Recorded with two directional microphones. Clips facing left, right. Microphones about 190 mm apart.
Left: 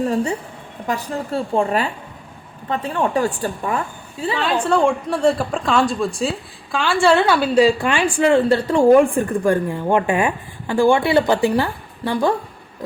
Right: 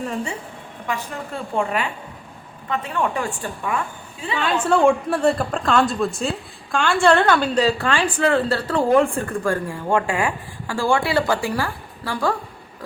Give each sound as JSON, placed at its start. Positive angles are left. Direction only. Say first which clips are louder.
{"t": 0.0, "sound": "a woman's voice", "louder": "left 7 dB", "side_deg": 35}
{"t": 4.7, "sound": "a woman's voice", "louder": "right 3 dB", "side_deg": 0}